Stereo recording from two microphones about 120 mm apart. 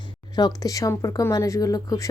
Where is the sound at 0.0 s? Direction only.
35° left (ahead or behind).